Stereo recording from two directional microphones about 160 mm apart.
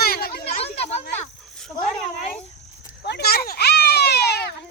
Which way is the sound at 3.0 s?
80° left.